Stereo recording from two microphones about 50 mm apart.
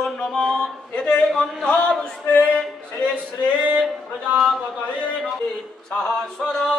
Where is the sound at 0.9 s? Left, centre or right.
Centre.